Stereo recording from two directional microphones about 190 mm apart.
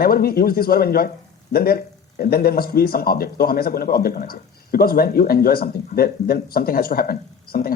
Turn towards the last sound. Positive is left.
turn(degrees=50)  # may be behind; listen again after turning